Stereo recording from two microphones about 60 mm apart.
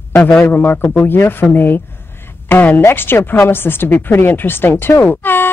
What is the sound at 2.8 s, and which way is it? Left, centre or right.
Speech, left.